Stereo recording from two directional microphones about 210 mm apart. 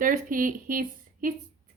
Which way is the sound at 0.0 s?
40° right (ahead or behind).